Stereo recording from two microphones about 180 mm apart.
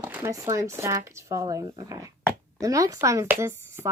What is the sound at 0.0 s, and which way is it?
Speech, 10° right (ahead or behind).